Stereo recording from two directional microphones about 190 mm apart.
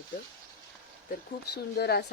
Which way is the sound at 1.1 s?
55° left (ahead or behind).